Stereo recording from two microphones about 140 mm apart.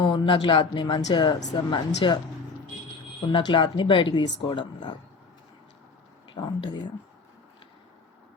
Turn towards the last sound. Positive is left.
turn(degrees=30)  # may be behind; listen again after turning